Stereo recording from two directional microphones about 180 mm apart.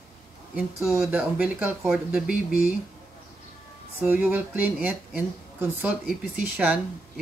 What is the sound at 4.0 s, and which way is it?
Speech, 10° right (ahead or behind).